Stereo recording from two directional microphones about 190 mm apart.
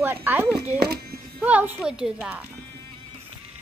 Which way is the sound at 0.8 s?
55° right (ahead or behind).